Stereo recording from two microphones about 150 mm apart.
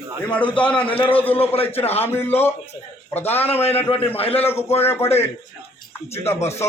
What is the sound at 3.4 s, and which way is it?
Speech, 40° left (ahead or behind).